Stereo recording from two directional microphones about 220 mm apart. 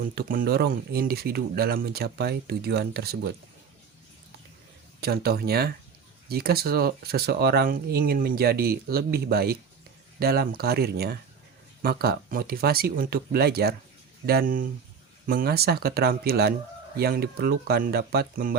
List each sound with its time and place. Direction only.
0.2 s speech: 40° right (ahead or behind)
4.9 s speech: 45° right (ahead or behind)